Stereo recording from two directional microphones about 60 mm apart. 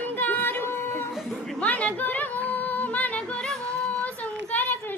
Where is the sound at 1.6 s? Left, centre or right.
Left.